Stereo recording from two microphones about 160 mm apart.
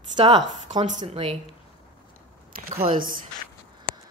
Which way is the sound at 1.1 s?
35° right (ahead or behind).